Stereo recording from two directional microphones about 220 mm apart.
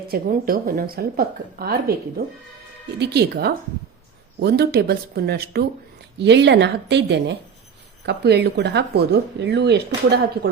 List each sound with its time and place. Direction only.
0.1 s a woman's voice: 40° right (ahead or behind)